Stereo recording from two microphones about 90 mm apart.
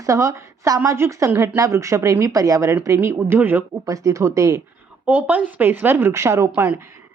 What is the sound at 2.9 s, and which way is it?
Speech, 20° right (ahead or behind).